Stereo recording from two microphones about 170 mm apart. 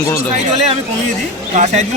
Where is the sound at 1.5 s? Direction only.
40° right (ahead or behind).